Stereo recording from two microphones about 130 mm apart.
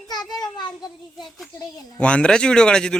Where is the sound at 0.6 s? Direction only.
35° left (ahead or behind).